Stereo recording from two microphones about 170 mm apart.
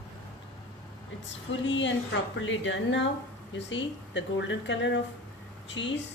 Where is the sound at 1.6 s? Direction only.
90° left.